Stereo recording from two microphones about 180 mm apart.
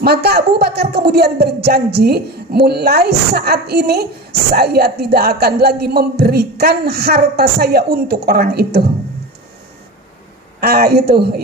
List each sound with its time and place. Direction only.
0.0 s speech: 60° right (ahead or behind)
10.6 s speech: 60° right (ahead or behind)